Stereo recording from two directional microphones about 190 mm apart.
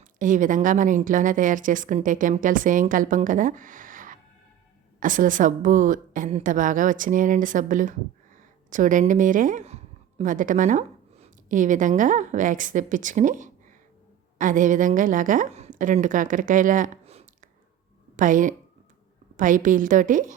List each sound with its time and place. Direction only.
0.2 s a woman's voice: 45° right (ahead or behind)